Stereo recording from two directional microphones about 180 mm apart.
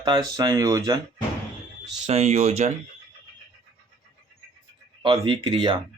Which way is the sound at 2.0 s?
35° right (ahead or behind).